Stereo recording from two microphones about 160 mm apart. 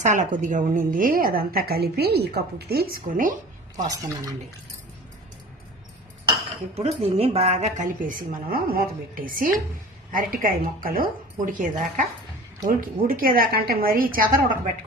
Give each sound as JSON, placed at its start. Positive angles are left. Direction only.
{"t": 0.0, "sound": "a woman's voice", "side_deg": -50}
{"t": 6.3, "sound": "dishes", "side_deg": -40}
{"t": 7.0, "sound": "a woman's voice", "side_deg": -35}